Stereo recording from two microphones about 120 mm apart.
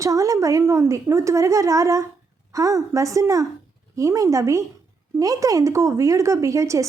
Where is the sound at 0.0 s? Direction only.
25° right (ahead or behind).